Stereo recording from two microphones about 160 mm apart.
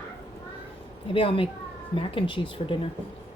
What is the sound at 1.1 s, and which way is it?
A woman's voice, 35° left (ahead or behind).